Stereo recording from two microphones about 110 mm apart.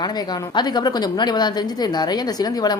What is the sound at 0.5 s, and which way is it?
Speech, 40° left (ahead or behind).